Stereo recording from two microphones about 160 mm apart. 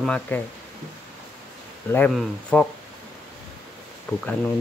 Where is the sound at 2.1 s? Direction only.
5° left (ahead or behind).